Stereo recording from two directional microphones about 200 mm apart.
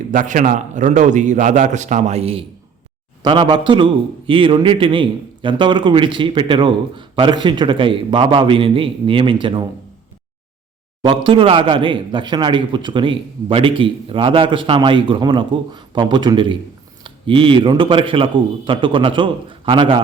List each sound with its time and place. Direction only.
0.1 s a man's voice: 40° right (ahead or behind); by 9.6 s 25° right (ahead or behind)
11.0 s a man's voice: 25° right (ahead or behind)